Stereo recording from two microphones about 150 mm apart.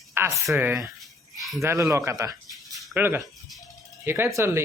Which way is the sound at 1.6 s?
20° right (ahead or behind).